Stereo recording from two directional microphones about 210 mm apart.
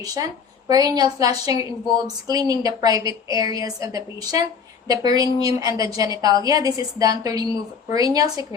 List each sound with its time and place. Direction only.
0.0 s a woman's voice: 15° right (ahead or behind)